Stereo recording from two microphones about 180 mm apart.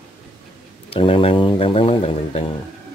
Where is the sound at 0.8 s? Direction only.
30° left (ahead or behind).